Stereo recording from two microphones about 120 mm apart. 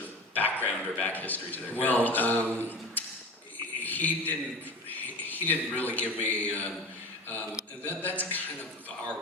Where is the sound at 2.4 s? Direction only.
20° right (ahead or behind).